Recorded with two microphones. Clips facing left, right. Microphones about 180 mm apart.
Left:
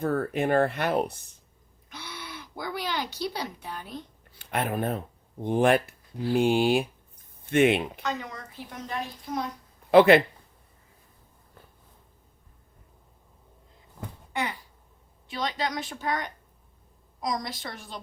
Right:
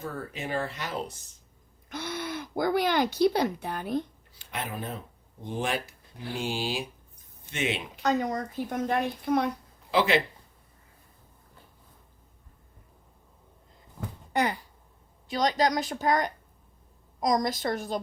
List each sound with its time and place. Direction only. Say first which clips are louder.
0.0 s speech: left 10 dB; 55° left (ahead or behind)
1.9 s speech: right 8 dB; 45° right (ahead or behind)
4.4 s speech: left 7 dB; 60° left (ahead or behind)
8.0 s a child's voice: right 7 dB; 45° right (ahead or behind); by 9.5 s 60° right (ahead or behind)
9.9 s speech: left 9 dB; 55° left (ahead or behind)
14.3 s a child's voice: right 5 dB; 40° right (ahead or behind)